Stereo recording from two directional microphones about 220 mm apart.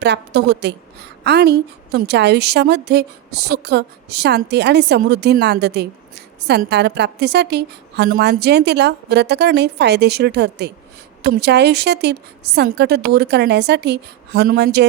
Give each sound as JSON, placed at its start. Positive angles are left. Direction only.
{"t": 0.0, "sound": "a woman's voice", "side_deg": -50}